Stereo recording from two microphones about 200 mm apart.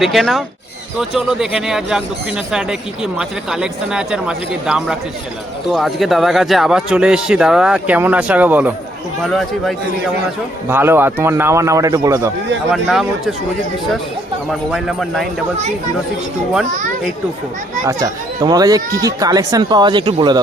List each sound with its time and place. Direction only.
0.0 s speech: centre (ahead or behind)
10.7 s a man's voice: 10° right (ahead or behind)
12.7 s speech: centre (ahead or behind)
14.5 s speech: centre (ahead or behind)
17.8 s speech: 20° right (ahead or behind)